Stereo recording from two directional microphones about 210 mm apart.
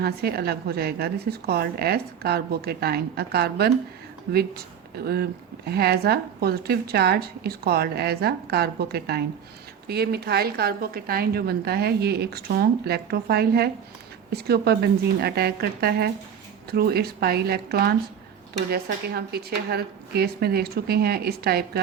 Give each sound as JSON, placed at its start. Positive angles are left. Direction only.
{"t": 0.0, "sound": "speech", "side_deg": -50}